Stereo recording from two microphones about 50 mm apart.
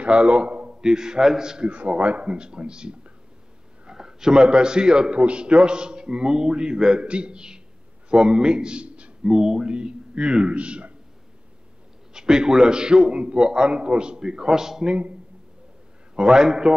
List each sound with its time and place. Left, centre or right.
0.0 s a man's voice: right
0.7 s a man's voice: centre
9.2 s a man's voice: centre
12.1 s a man's voice: centre
16.2 s a man's voice: centre